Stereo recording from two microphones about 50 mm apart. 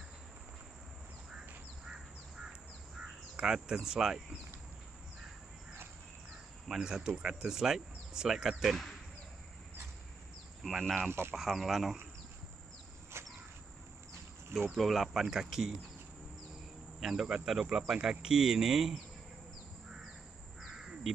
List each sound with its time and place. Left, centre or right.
1.9 s duck: centre
3.0 s speech: centre
6.7 s speech: centre
10.8 s speech: centre
11.1 s speech: right
11.3 s speech: centre
13.1 s cricket: right
14.7 s speech: centre
17.0 s speech: centre
20.7 s crow: centre